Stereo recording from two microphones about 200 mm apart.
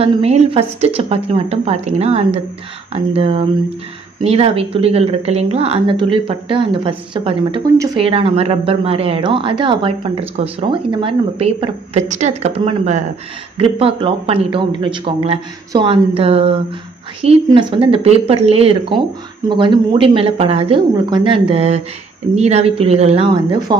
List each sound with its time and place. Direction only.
0.0 s a woman's voice: 30° right (ahead or behind)